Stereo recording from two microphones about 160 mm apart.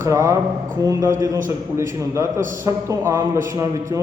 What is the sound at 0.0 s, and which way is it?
A man's voice, 20° right (ahead or behind).